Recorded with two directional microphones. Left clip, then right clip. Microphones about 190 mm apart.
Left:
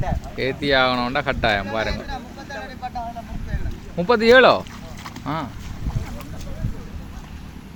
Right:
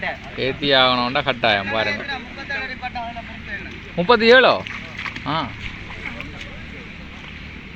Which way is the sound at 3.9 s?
10° left (ahead or behind).